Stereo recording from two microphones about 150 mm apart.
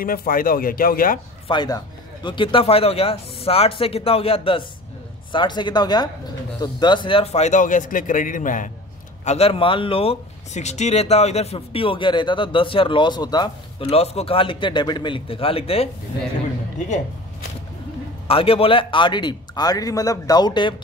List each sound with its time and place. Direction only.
0.0 s speech: 75° left (ahead or behind)
1.5 s a man's voice: 30° left (ahead or behind); by 8.6 s 60° left (ahead or behind)
9.2 s speech: 45° left (ahead or behind); by 13.8 s 25° left (ahead or behind)
13.8 s speech: 45° left (ahead or behind)
18.2 s speech: 40° left (ahead or behind)